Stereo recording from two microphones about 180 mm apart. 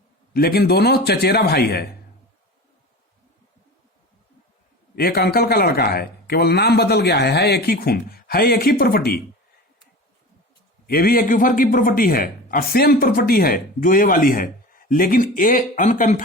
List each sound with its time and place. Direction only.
0.3 s a man's voice: 60° left (ahead or behind)
4.9 s a man's voice: 60° left (ahead or behind)
10.8 s a man's voice: 55° left (ahead or behind)